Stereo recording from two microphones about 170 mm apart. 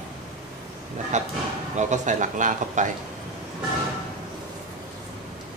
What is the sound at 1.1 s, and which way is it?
Speech, 45° right (ahead or behind).